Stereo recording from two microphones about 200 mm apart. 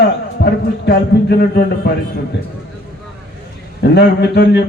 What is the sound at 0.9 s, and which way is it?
A man's voice, 55° left (ahead or behind).